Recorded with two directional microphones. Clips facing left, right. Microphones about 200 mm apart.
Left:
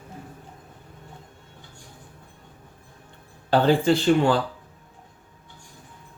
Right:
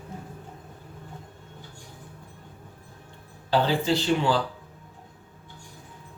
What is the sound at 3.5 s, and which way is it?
Speech, 55° left (ahead or behind).